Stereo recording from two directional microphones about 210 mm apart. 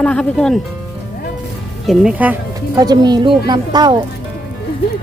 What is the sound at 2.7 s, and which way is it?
Speech, 20° right (ahead or behind).